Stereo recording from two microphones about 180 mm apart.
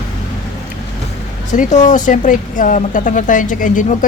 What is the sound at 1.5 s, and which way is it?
Speech, 45° left (ahead or behind).